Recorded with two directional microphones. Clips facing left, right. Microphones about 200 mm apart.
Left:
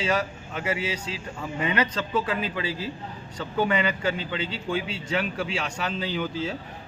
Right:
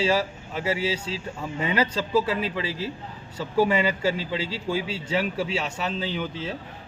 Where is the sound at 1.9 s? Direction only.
10° right (ahead or behind).